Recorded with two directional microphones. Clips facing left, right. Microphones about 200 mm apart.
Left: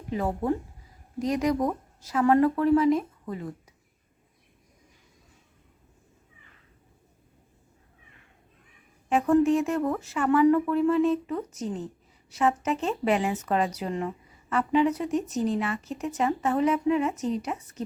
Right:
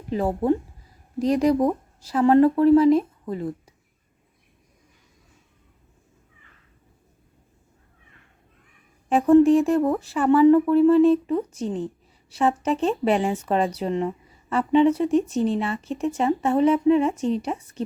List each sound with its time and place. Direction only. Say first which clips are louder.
0.1 s speech: right 5 dB; 30° right (ahead or behind)
9.0 s speech: right 6 dB; 35° right (ahead or behind)